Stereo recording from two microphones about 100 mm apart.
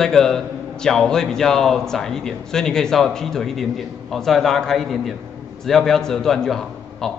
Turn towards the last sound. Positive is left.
turn(degrees=5)  # may be behind; listen again after turning